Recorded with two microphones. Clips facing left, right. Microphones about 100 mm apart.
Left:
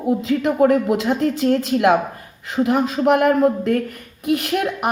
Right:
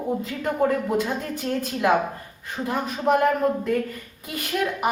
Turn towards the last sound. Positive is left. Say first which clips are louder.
# left 4 dB
turn(degrees=60)  # may be behind; listen again after turning